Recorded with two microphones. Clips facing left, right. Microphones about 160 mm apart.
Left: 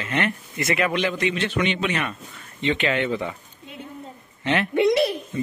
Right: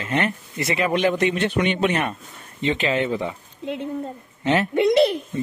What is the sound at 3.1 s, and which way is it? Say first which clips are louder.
Speech: right 1 dB; 25° right (ahead or behind).